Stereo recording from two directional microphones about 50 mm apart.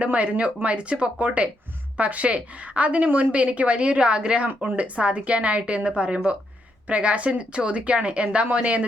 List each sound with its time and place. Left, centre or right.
0.0 s a woman's voice: right
4.4 s a woman's voice: right